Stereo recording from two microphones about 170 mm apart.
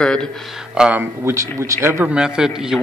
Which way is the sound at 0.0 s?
5° left (ahead or behind).